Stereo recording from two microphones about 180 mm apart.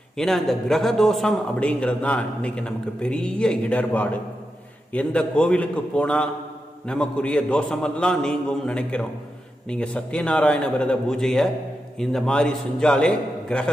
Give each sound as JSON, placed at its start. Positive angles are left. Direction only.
{"t": 0.2, "sound": "a man's voice", "side_deg": 0}